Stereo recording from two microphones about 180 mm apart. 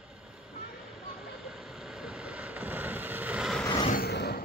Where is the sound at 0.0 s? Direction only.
5° right (ahead or behind).